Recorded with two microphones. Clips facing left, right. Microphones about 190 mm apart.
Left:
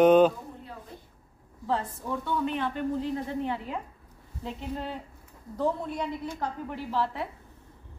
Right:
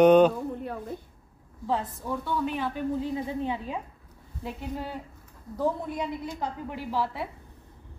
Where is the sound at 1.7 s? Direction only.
5° right (ahead or behind).